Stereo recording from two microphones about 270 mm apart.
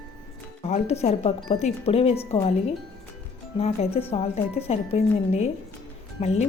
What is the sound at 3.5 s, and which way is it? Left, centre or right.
Speech, left.